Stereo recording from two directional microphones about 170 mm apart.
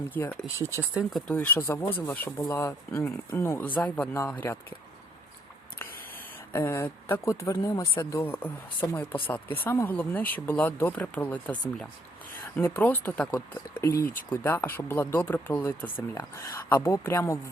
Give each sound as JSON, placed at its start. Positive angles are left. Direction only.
{"t": 0.1, "sound": "speech", "side_deg": 10}
{"t": 0.4, "sound": "speech", "side_deg": -15}
{"t": 1.3, "sound": "speech", "side_deg": 10}
{"t": 6.5, "sound": "speech", "side_deg": 15}